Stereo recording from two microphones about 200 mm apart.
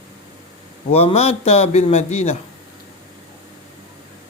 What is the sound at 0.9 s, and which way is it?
A man's voice, 30° left (ahead or behind).